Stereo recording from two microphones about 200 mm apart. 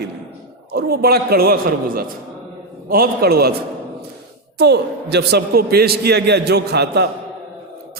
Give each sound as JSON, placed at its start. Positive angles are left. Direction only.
{"t": 0.7, "sound": "a man's voice", "side_deg": -50}
{"t": 4.5, "sound": "a man's voice", "side_deg": -55}